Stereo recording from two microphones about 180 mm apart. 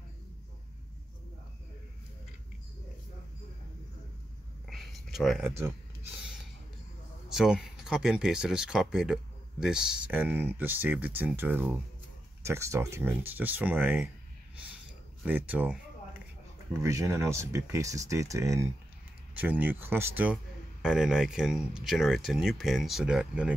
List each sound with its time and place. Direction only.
4.6 s a sound: centre (ahead or behind)
5.4 s speech: 15° right (ahead or behind)
7.2 s speech: 5° right (ahead or behind)
15.2 s speech: 10° right (ahead or behind)